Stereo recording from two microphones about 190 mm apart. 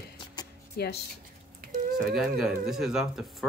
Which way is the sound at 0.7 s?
60° left (ahead or behind).